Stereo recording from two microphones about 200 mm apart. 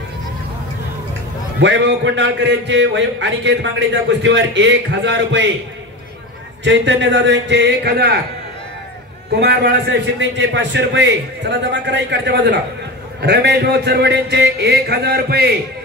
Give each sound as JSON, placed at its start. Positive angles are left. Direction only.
{"t": 1.6, "sound": "a man's voice", "side_deg": -60}
{"t": 6.6, "sound": "a man's voice", "side_deg": -65}
{"t": 9.4, "sound": "a man's voice", "side_deg": -55}